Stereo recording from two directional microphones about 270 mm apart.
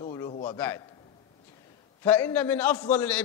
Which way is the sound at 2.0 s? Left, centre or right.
Centre.